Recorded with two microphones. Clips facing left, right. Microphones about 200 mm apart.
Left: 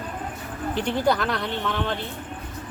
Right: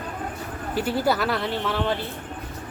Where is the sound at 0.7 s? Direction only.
5° right (ahead or behind).